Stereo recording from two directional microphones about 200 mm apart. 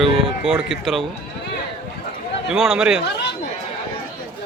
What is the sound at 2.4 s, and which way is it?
Speech, centre (ahead or behind).